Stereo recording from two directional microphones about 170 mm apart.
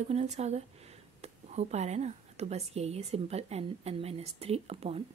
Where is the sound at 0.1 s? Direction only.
40° right (ahead or behind).